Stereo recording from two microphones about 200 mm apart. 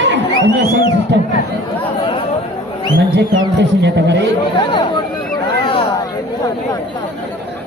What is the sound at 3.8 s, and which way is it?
Speech, 60° right (ahead or behind).